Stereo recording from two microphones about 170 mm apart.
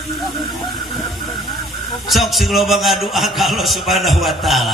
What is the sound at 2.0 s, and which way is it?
A man's voice, centre (ahead or behind).